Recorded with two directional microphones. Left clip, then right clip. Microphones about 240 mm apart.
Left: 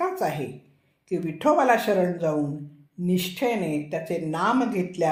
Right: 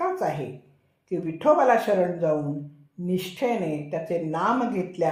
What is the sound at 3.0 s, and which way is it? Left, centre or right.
Speech, left.